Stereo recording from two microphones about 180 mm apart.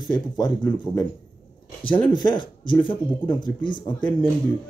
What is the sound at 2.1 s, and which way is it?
Speech, 25° left (ahead or behind).